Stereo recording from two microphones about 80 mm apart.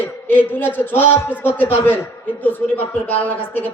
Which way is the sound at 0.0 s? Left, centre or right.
Left.